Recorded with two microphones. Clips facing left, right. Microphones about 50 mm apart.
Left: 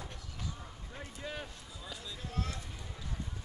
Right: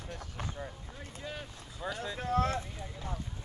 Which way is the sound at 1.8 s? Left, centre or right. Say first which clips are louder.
Right 9 dB; right.